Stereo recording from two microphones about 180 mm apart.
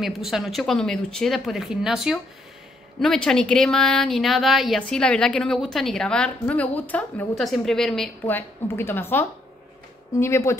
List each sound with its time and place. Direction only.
0.0 s speech: centre (ahead or behind); by 10.6 s 15° left (ahead or behind)